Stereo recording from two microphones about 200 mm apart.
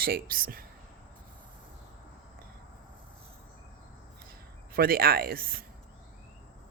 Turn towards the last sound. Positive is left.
turn(degrees=-50)  # may be behind; listen again after turning